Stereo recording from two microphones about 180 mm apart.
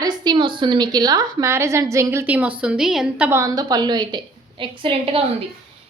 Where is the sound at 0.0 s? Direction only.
25° right (ahead or behind).